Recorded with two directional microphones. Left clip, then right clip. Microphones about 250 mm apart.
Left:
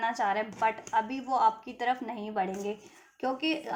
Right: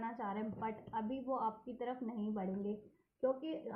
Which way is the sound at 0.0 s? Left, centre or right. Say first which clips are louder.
Left 14 dB; left.